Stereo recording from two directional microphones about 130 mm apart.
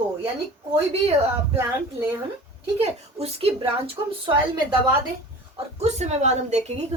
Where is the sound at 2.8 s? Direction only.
50° right (ahead or behind).